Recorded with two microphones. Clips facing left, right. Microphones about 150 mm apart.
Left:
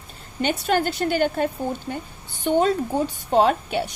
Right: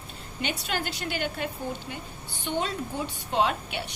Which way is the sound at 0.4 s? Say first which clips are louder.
Left 10 dB; 45° left (ahead or behind).